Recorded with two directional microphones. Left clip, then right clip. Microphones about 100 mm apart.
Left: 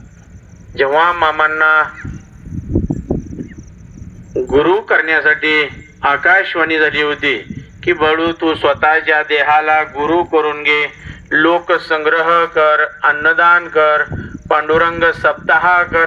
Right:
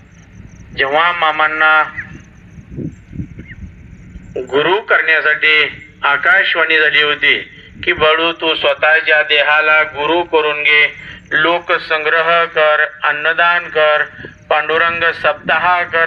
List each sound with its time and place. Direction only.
0.8 s speech: 40° left (ahead or behind)
4.4 s a man's voice: 55° left (ahead or behind)